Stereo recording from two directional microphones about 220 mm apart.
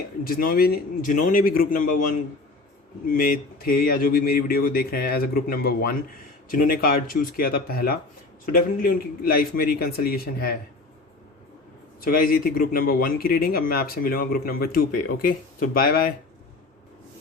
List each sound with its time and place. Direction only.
0.3 s a man's voice: 40° left (ahead or behind)
11.9 s a man's voice: 40° left (ahead or behind)